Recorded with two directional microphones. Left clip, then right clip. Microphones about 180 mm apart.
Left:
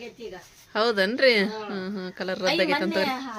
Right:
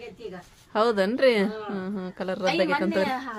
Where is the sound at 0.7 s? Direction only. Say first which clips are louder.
Even; 10° right (ahead or behind).